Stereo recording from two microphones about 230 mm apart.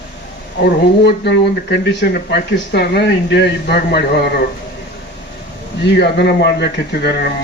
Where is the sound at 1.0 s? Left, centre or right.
Left.